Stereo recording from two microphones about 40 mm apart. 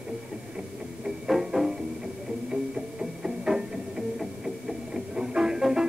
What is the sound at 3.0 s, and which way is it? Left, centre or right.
Music, centre.